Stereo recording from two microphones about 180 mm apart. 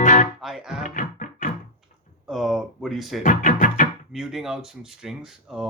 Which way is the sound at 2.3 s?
Centre (ahead or behind).